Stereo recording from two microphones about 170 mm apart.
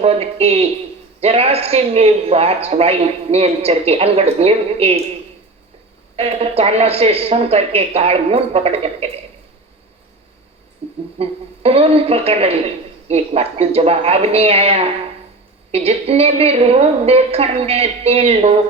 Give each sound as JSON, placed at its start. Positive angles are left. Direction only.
{"t": 0.0, "sound": "a woman's voice", "side_deg": -35}
{"t": 6.1, "sound": "a woman's voice", "side_deg": -35}
{"t": 10.8, "sound": "music", "side_deg": -35}
{"t": 11.2, "sound": "a woman's voice", "side_deg": -35}